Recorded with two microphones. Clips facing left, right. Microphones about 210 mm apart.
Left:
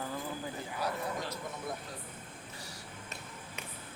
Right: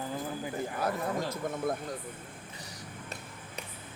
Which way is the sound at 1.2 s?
50° right (ahead or behind).